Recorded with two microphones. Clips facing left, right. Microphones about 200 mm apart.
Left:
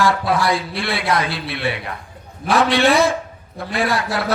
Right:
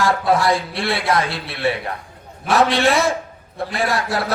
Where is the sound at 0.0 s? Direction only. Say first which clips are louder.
Right 1 dB; 30° right (ahead or behind).